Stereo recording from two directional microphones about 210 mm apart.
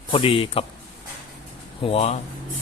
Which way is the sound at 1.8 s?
25° left (ahead or behind).